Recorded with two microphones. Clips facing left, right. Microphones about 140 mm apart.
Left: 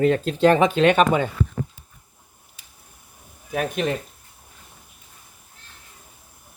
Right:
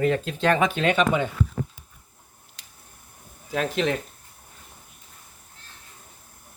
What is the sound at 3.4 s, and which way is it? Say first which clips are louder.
Speech: even; 20° left (ahead or behind).